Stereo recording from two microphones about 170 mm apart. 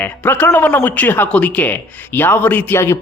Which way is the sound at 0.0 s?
10° left (ahead or behind).